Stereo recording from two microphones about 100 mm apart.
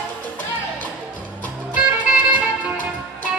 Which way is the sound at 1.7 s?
15° right (ahead or behind).